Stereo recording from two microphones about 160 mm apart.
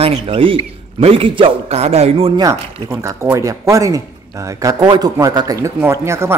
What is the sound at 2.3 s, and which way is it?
Speech, 20° right (ahead or behind).